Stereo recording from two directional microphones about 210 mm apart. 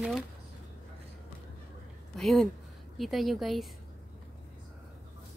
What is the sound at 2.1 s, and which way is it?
A woman's voice, centre (ahead or behind).